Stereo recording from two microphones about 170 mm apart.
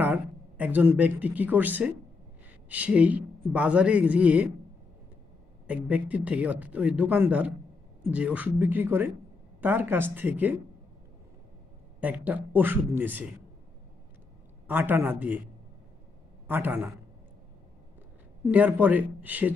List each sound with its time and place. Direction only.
0.0 s speech: 10° right (ahead or behind)
5.7 s speech: 10° right (ahead or behind)
12.0 s speech: 10° right (ahead or behind)
14.7 s speech: 10° right (ahead or behind)
16.4 s speech: 10° right (ahead or behind)
18.5 s speech: 10° right (ahead or behind)